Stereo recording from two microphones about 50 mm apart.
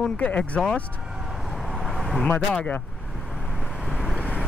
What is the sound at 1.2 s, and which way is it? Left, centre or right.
Vehicle, centre.